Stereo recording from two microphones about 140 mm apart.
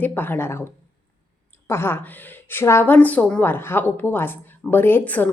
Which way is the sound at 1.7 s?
15° left (ahead or behind).